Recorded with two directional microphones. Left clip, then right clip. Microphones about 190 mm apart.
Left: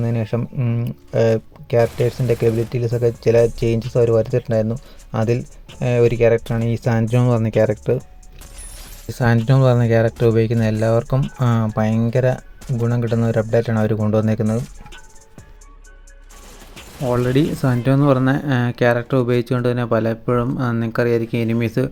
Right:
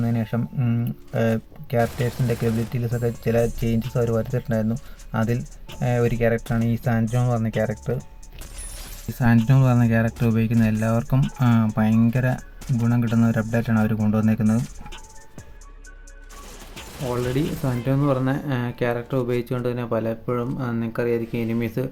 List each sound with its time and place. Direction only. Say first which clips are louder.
0.0 s a sound: left 3 dB; centre (ahead or behind)
0.3 s speech: left 4 dB; 25° left (ahead or behind)
1.8 s speech: left 5 dB; centre (ahead or behind)
2.7 s speech: left 8 dB; 25° left (ahead or behind)
6.4 s speech: left 2 dB; centre (ahead or behind)
6.7 s speech: left 7 dB; 30° left (ahead or behind)
9.1 s speech: left 3 dB; 30° left (ahead or behind)
12.3 s speech: left 5 dB; centre (ahead or behind)
13.1 s speech: left 8 dB; 25° left (ahead or behind)
14.5 s speech: left 2 dB; centre (ahead or behind)
16.4 s bird: even; centre (ahead or behind)
18.1 s speech: left 6 dB; 30° left (ahead or behind)